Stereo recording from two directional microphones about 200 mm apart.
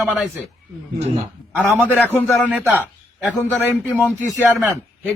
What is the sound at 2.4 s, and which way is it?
Speech, 5° right (ahead or behind).